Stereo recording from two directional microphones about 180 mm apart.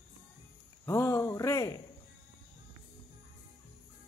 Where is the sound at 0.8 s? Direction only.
15° left (ahead or behind).